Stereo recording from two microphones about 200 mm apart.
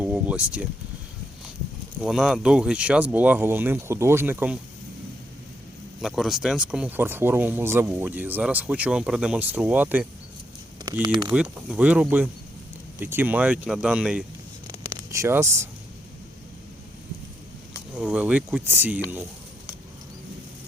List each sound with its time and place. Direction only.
0.0 s vehicle: 5° right (ahead or behind)
2.0 s speech: 5° right (ahead or behind)
6.0 s speech: centre (ahead or behind)
10.8 s speech: 20° right (ahead or behind)
11.3 s speech: 5° right (ahead or behind)
14.7 s a sound: 15° right (ahead or behind)
17.9 s speech: 5° right (ahead or behind)